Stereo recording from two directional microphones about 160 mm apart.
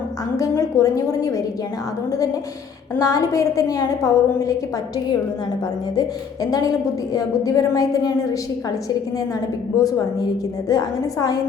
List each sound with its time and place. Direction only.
0.3 s a woman's voice: 20° left (ahead or behind)
3.0 s a woman's voice: 20° left (ahead or behind)
6.0 s a woman's voice: 25° left (ahead or behind)
9.7 s a woman's voice: 25° left (ahead or behind)